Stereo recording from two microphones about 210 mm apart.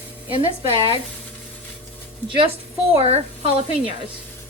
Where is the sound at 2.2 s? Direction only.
25° right (ahead or behind).